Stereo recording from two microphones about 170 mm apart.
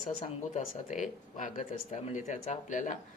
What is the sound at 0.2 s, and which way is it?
Speech, 45° left (ahead or behind).